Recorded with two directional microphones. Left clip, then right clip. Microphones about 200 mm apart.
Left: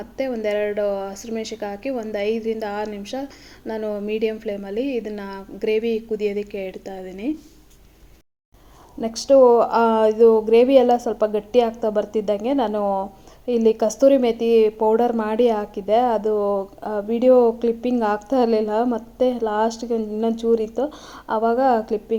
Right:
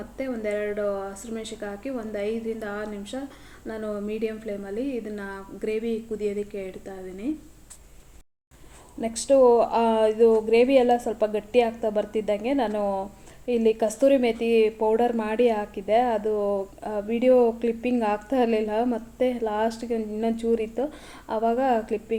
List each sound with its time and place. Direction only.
0.2 s speech: 30° left (ahead or behind)
9.0 s a woman's voice: 15° left (ahead or behind)